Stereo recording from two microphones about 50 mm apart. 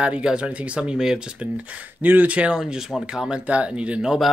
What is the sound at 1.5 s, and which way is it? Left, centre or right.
Speech, right.